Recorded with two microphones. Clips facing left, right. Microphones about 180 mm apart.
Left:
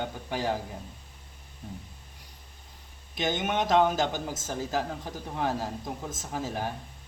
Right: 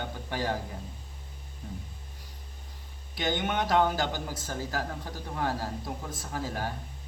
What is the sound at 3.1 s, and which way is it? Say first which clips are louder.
Speech: left 1 dB; 20° left (ahead or behind).